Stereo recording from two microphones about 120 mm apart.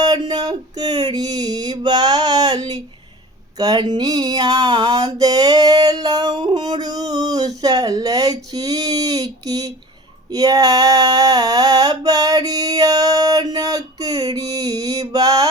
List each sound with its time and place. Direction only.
0.0 s a sound: 35° right (ahead or behind)
3.6 s mantra: 35° right (ahead or behind)
10.2 s female singing: 30° right (ahead or behind)